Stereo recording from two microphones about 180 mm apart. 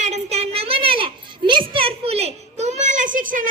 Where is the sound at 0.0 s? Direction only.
40° right (ahead or behind).